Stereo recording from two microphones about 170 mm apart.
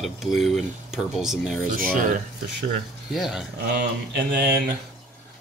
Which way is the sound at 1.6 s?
55° right (ahead or behind).